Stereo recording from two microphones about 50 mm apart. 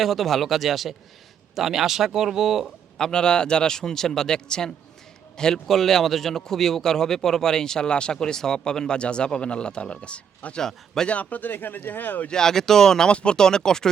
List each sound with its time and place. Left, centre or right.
0.0 s speech: centre
3.0 s speech: centre
10.6 s speech: centre
11.1 s speech: left
12.3 s speech: centre